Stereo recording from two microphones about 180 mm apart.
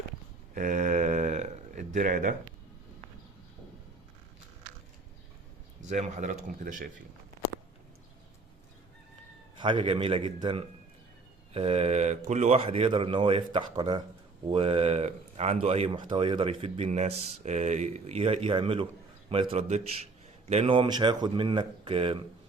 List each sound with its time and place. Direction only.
0.5 s a sound: 45° right (ahead or behind)
5.8 s speech: 40° right (ahead or behind)
9.6 s speech: 25° right (ahead or behind)